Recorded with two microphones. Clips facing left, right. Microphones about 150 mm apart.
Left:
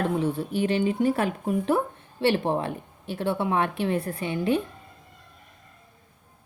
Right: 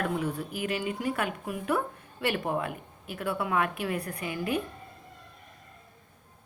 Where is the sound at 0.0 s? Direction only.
25° left (ahead or behind).